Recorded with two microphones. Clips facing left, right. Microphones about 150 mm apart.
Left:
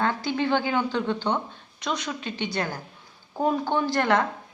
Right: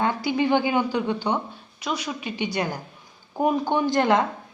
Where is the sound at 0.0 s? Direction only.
15° right (ahead or behind).